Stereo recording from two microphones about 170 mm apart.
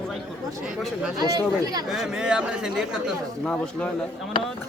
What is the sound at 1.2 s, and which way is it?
Speech, 25° right (ahead or behind).